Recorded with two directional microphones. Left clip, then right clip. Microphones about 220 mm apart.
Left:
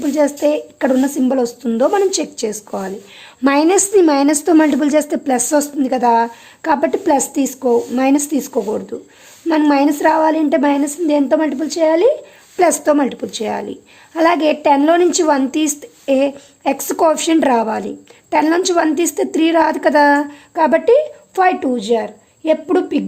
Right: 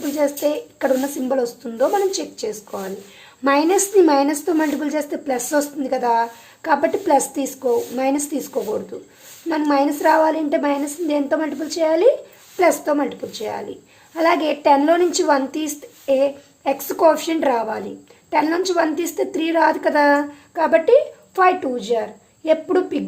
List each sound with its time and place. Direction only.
0.0 s a woman's voice: 35° left (ahead or behind)